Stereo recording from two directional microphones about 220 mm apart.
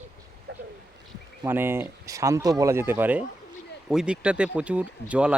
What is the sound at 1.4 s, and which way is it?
Speech, 10° right (ahead or behind).